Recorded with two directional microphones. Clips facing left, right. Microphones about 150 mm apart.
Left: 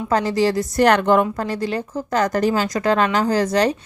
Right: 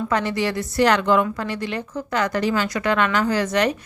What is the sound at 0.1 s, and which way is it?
Speech, 35° left (ahead or behind).